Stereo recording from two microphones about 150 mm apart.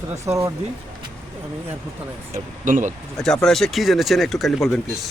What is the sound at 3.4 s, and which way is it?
Speech, centre (ahead or behind).